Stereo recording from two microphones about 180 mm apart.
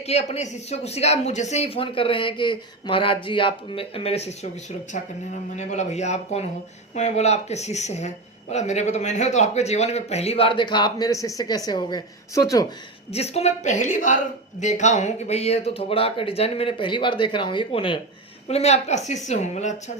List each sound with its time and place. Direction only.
0.0 s speech: 35° left (ahead or behind); by 12.6 s 20° left (ahead or behind)
13.1 s speech: 35° left (ahead or behind)